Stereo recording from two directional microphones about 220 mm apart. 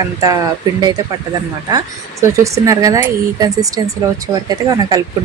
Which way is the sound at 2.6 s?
15° right (ahead or behind).